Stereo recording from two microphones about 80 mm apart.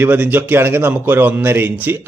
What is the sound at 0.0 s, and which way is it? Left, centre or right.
A man's voice, right.